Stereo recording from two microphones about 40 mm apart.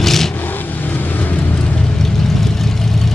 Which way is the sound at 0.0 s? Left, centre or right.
Centre.